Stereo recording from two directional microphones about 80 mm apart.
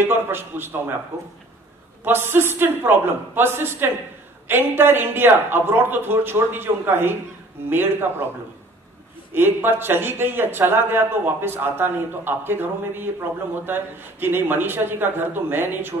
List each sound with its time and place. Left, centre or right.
0.0 s a man's voice: right
2.0 s a man's voice: right
9.3 s a man's voice: right